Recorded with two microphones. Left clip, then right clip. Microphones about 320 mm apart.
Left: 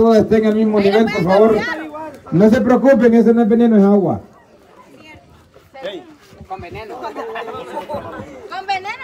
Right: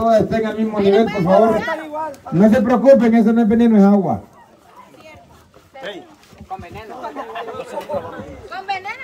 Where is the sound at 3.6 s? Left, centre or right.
Centre.